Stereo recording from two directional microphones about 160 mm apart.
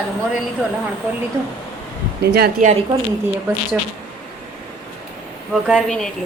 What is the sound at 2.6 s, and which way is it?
Speech, 55° right (ahead or behind).